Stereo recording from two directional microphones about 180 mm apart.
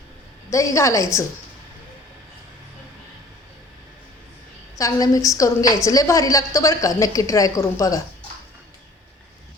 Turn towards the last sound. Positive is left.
turn(degrees=20)  # may be behind; listen again after turning